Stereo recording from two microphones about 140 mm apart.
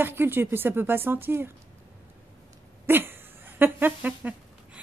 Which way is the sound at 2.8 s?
15° right (ahead or behind).